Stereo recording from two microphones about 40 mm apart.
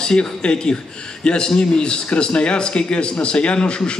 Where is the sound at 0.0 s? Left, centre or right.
Left.